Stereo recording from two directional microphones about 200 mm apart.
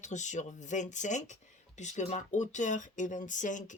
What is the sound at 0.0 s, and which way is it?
Speech, 35° left (ahead or behind).